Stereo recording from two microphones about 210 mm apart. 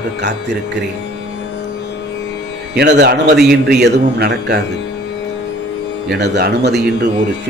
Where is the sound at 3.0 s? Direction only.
50° right (ahead or behind).